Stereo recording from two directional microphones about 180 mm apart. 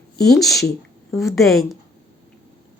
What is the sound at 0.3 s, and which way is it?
A woman's voice, centre (ahead or behind).